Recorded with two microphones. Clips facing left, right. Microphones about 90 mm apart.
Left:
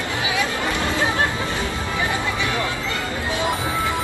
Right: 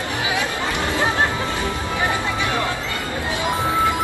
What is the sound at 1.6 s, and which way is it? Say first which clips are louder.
Music: right 2 dB; 20° right (ahead or behind).